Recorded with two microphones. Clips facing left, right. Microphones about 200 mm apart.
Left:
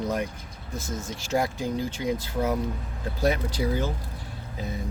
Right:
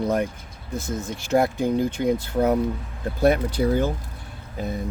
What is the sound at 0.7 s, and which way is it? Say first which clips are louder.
Speech: right 5 dB; 60° right (ahead or behind).